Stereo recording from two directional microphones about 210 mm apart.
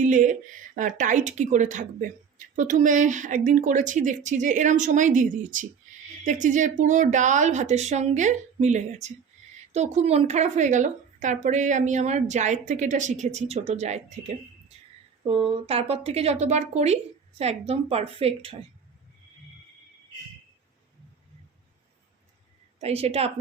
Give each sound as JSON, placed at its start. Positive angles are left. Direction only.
{"t": 0.0, "sound": "speech", "side_deg": -35}
{"t": 15.3, "sound": "a woman's voice", "side_deg": -25}
{"t": 22.8, "sound": "a woman's voice", "side_deg": -30}